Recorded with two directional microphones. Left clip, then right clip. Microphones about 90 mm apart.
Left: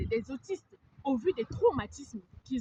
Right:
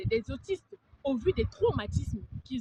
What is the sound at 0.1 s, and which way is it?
Speech, 40° right (ahead or behind).